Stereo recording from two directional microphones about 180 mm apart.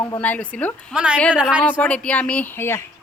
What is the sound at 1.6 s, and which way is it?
Speech, 5° left (ahead or behind).